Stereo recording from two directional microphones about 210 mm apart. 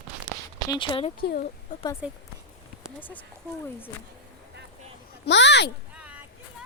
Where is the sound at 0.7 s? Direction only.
25° left (ahead or behind).